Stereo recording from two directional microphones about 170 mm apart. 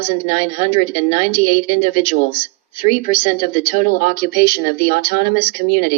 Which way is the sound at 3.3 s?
30° left (ahead or behind).